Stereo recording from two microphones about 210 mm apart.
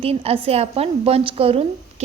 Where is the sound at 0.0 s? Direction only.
30° right (ahead or behind).